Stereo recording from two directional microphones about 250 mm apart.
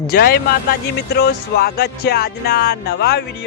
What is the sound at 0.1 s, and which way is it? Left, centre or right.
Speech, left.